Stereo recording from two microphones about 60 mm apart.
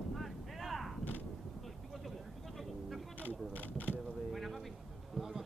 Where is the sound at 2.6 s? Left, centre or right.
Centre.